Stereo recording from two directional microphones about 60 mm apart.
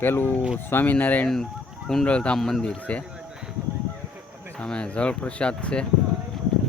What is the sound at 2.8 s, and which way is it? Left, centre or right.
Speech, left.